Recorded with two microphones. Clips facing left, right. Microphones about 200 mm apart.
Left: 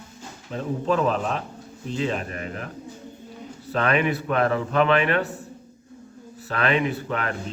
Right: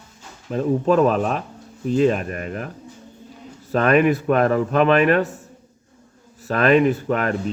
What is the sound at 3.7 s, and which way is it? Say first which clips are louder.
A man's voice: right 6 dB; 45° right (ahead or behind).